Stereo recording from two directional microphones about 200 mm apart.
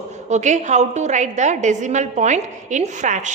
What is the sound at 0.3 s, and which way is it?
A woman's voice, 35° right (ahead or behind).